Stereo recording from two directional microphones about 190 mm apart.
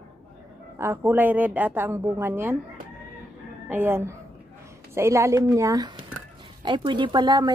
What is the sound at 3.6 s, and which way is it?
A woman's voice, 10° right (ahead or behind).